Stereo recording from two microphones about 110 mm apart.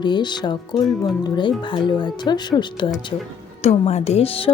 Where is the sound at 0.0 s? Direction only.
45° left (ahead or behind).